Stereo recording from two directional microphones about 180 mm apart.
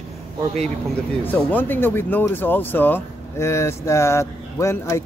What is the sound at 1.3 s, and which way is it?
Speech, 10° left (ahead or behind).